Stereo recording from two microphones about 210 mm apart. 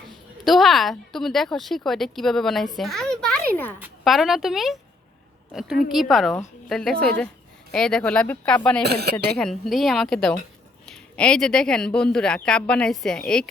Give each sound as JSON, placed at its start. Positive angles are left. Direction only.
{"t": 0.4, "sound": "speech", "side_deg": 0}
{"t": 2.7, "sound": "a sound", "side_deg": 0}
{"t": 3.8, "sound": "speech", "side_deg": -5}
{"t": 5.9, "sound": "speech", "side_deg": 0}
{"t": 8.8, "sound": "speech", "side_deg": -50}
{"t": 9.1, "sound": "speech", "side_deg": 0}